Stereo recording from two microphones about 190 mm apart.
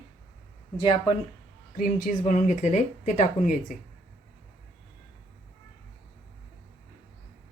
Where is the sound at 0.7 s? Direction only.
25° left (ahead or behind).